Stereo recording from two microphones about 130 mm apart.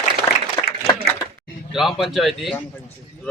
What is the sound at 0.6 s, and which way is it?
Applause, 35° left (ahead or behind).